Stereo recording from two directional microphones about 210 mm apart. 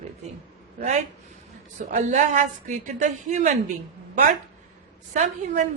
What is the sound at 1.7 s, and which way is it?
A woman's voice, 35° right (ahead or behind).